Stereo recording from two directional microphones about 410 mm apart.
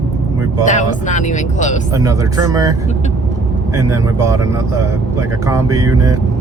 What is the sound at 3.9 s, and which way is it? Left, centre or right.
Speech, centre.